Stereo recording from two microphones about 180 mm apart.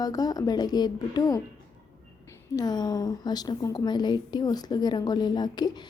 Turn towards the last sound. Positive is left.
turn(degrees=25)  # may be behind; listen again after turning